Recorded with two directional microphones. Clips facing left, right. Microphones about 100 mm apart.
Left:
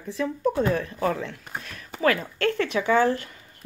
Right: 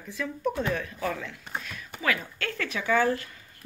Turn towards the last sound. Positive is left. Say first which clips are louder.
# left 4 dB
turn(degrees=30)  # may be behind; listen again after turning